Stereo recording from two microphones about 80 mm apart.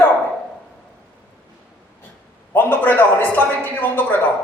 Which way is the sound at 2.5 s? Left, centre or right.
Left.